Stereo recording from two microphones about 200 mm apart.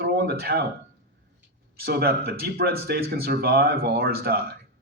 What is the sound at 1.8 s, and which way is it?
Speech, 50° right (ahead or behind).